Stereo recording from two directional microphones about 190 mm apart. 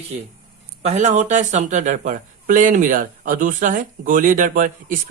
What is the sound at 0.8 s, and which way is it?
Speech, 35° right (ahead or behind).